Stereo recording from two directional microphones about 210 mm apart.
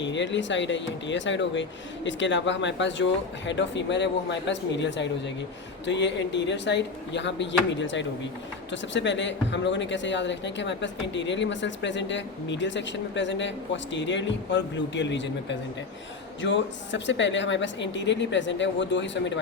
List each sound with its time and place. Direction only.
0.0 s speech: 60° left (ahead or behind)